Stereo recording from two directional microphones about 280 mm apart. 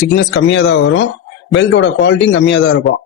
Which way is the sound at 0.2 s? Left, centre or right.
Left.